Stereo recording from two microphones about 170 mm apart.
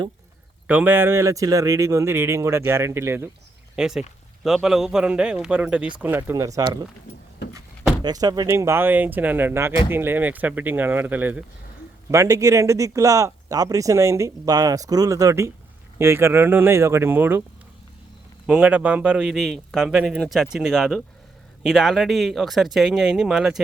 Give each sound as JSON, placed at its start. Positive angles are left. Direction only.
{"t": 0.7, "sound": "speech", "side_deg": -10}
{"t": 3.8, "sound": "a man's voice", "side_deg": -5}
{"t": 8.0, "sound": "speech", "side_deg": -25}
{"t": 18.4, "sound": "a man's voice", "side_deg": -5}